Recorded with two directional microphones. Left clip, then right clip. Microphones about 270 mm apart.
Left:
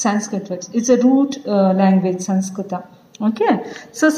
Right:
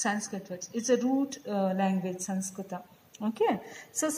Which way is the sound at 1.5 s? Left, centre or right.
Right.